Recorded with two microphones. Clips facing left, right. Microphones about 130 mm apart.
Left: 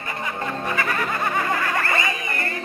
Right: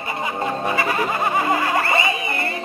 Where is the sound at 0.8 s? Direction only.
20° right (ahead or behind).